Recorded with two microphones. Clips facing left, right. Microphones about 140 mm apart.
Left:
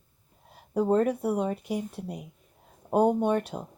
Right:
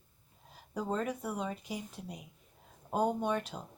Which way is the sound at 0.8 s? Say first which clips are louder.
Left 10 dB; 55° left (ahead or behind).